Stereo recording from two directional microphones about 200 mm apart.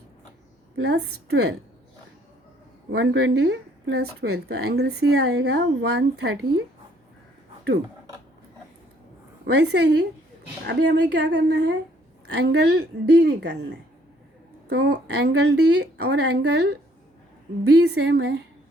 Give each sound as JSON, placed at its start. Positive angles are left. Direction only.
{"t": 0.8, "sound": "speech", "side_deg": -55}
{"t": 2.9, "sound": "speech", "side_deg": -60}
{"t": 9.5, "sound": "speech", "side_deg": -60}